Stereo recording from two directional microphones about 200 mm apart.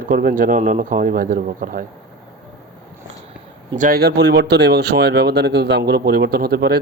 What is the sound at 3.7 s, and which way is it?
Speech, 45° right (ahead or behind).